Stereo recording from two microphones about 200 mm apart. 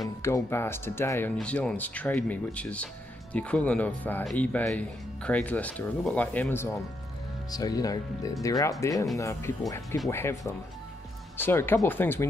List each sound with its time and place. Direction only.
0.2 s speech: 10° left (ahead or behind)